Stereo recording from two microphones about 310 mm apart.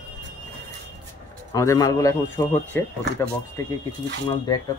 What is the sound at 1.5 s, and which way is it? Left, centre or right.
Speech, centre.